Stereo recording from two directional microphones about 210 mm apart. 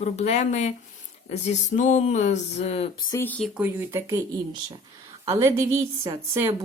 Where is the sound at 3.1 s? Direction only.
10° left (ahead or behind).